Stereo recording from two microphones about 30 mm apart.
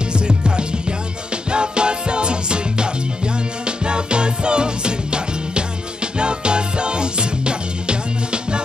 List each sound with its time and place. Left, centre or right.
0.1 s music: right